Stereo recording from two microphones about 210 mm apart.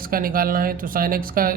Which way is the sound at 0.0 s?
45° right (ahead or behind).